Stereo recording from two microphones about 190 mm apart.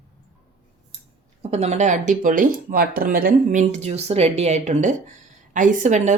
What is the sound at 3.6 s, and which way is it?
Speech, 35° right (ahead or behind).